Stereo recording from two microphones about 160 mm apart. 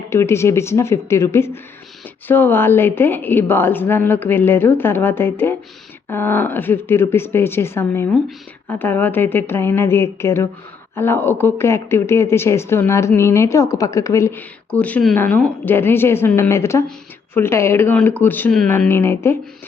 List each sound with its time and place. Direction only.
0.1 s speech: 15° left (ahead or behind)